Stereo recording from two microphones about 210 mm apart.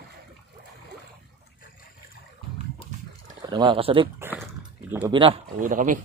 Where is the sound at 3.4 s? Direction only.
20° right (ahead or behind).